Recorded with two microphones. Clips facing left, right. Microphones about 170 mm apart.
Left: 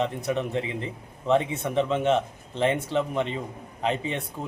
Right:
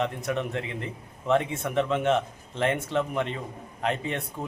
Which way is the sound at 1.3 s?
Centre (ahead or behind).